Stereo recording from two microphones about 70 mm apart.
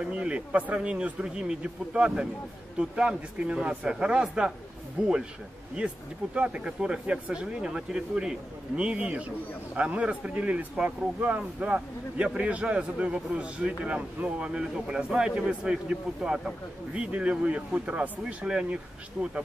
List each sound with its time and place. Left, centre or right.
0.0 s speech: centre
5.8 s speech: centre